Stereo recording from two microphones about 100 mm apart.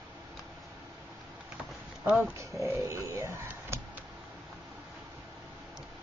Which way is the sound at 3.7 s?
25° right (ahead or behind).